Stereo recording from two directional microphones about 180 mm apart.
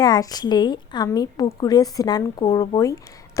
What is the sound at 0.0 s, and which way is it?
A woman's voice, 20° left (ahead or behind).